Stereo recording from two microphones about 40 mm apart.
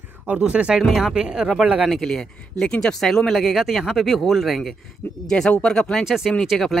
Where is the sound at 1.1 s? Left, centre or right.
Centre.